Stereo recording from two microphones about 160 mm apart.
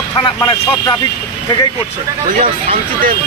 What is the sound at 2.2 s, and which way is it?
Speech, 55° right (ahead or behind).